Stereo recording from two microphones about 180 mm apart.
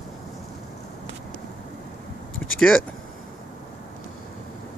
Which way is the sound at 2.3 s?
90° left.